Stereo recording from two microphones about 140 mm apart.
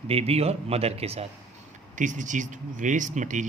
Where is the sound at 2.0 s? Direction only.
65° right (ahead or behind).